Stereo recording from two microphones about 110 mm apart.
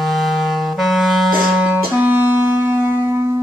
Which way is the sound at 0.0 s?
Centre (ahead or behind).